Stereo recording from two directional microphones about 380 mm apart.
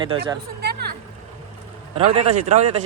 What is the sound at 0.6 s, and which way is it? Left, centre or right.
Vehicle, right.